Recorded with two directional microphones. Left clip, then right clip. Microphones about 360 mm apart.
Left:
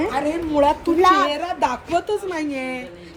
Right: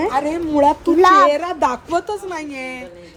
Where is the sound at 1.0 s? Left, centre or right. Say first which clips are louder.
Right 5 dB; centre.